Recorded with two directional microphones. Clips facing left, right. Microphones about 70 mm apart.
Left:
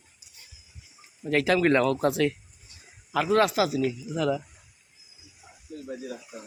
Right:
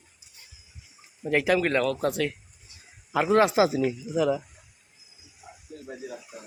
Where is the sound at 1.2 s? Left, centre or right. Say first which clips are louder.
Even; centre.